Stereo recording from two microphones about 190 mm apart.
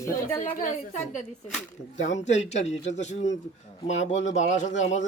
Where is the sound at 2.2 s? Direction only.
35° left (ahead or behind).